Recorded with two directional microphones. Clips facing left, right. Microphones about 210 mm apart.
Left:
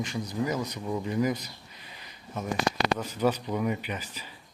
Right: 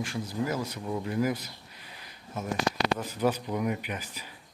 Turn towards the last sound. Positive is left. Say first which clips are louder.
# left 1 dB
turn(degrees=-10)  # may be behind; listen again after turning